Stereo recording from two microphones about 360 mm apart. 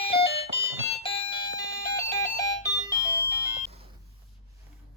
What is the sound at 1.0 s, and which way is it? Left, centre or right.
Doorbell, centre.